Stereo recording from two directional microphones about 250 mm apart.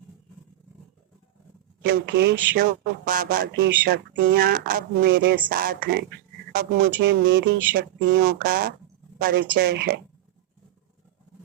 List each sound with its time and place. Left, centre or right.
1.8 s speech: right